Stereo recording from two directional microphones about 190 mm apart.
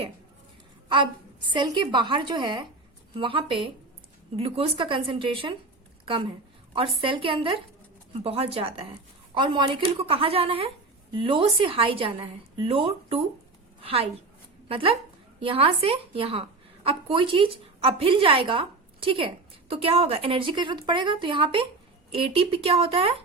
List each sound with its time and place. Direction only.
1.5 s a woman's voice: 25° right (ahead or behind)